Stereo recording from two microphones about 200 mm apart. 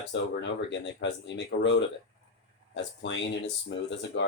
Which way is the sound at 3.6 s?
60° left (ahead or behind).